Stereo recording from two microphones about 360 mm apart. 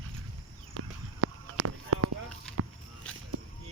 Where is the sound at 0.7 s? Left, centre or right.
Right.